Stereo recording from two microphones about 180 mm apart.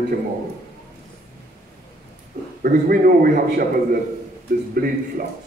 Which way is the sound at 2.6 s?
55° right (ahead or behind).